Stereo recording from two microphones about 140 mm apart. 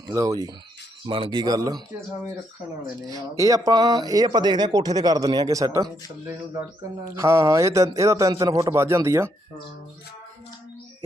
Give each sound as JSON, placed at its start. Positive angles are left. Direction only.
{"t": 0.1, "sound": "speech", "side_deg": -25}
{"t": 3.3, "sound": "speech", "side_deg": -25}